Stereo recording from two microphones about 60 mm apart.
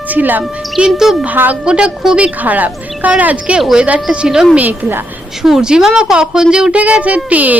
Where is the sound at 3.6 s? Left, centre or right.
Centre.